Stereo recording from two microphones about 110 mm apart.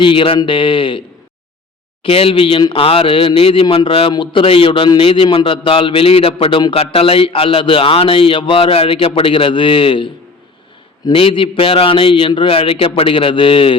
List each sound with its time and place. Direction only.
0.0 s a man's voice: 55° left (ahead or behind)
2.0 s a man's voice: 60° left (ahead or behind)
11.1 s a man's voice: 55° left (ahead or behind)